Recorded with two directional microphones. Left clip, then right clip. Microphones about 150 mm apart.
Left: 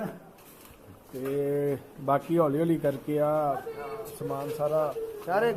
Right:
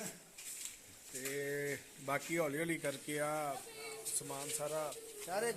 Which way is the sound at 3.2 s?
40° right (ahead or behind).